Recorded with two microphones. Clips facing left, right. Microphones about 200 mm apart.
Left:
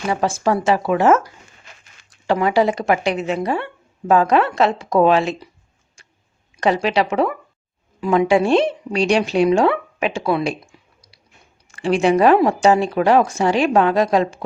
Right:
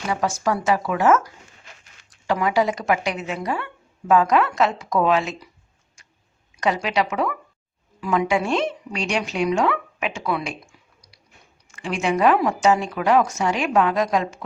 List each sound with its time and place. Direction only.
0.1 s speech: 30° left (ahead or behind)
6.6 s a woman's voice: 30° left (ahead or behind)